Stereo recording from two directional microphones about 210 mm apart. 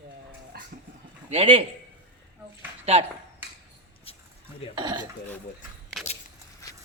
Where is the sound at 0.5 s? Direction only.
45° right (ahead or behind).